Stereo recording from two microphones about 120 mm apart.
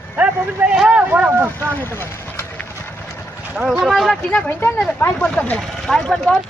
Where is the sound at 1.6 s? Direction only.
15° left (ahead or behind).